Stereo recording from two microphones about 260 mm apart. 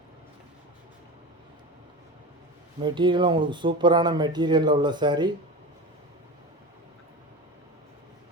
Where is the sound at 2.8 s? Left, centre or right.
Centre.